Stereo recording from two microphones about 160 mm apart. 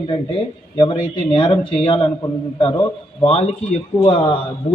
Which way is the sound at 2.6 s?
30° left (ahead or behind).